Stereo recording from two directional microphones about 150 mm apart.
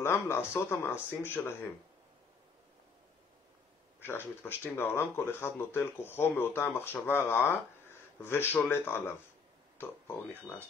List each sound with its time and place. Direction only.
0.0 s speech: 15° left (ahead or behind)
4.0 s speech: 15° left (ahead or behind)